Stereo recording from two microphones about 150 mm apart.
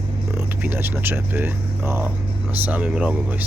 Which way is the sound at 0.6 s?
15° right (ahead or behind).